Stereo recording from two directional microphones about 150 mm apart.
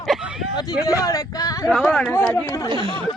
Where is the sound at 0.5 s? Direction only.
20° left (ahead or behind).